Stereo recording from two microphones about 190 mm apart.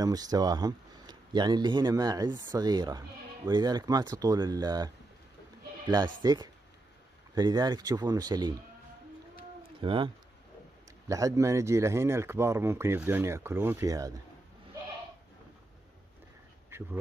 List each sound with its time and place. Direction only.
0.0 s speech: 20° right (ahead or behind)
9.8 s speech: 25° right (ahead or behind)
16.7 s duck: 10° right (ahead or behind)